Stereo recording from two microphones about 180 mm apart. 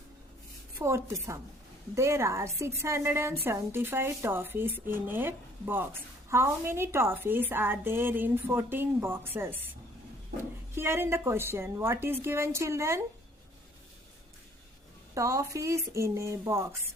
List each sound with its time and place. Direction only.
0.8 s a woman's voice: 15° right (ahead or behind)
10.8 s a woman's voice: 15° right (ahead or behind)
15.1 s a woman's voice: 20° right (ahead or behind)